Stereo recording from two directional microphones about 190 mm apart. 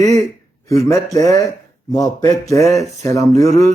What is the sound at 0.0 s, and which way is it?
Speech, 20° left (ahead or behind).